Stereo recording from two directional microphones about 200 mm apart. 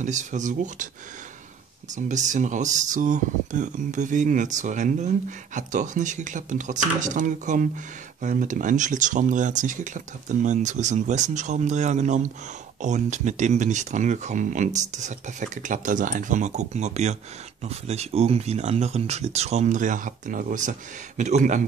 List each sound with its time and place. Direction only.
0.0 s speech: 35° right (ahead or behind)
2.0 s speech: 35° right (ahead or behind)